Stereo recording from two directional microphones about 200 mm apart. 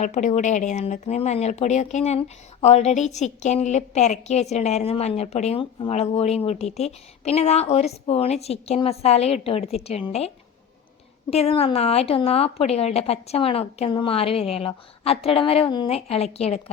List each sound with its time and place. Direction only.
0.0 s a woman's voice: 35° left (ahead or behind)